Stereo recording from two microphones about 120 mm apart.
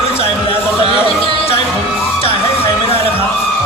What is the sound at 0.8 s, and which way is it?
Music, 50° left (ahead or behind).